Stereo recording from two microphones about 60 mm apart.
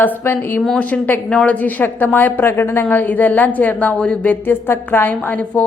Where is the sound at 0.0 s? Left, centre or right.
Left.